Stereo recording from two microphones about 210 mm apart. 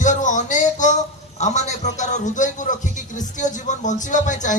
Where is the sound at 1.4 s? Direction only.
35° left (ahead or behind).